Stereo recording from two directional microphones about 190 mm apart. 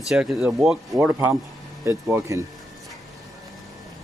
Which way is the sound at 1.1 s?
15° right (ahead or behind).